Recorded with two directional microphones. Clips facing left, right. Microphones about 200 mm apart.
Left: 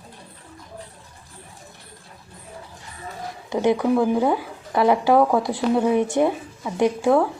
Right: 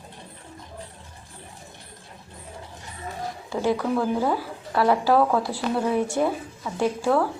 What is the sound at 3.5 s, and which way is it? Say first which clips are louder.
Speech: left 5 dB; 20° left (ahead or behind).